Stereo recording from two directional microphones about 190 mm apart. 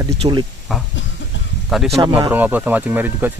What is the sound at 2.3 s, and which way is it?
Speech, 10° right (ahead or behind).